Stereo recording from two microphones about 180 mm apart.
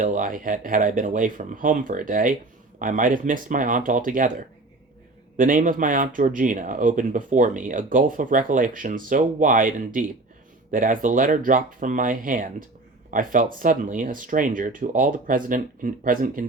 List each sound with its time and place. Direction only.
0.0 s speech: 50° right (ahead or behind)
5.4 s speech: 45° right (ahead or behind)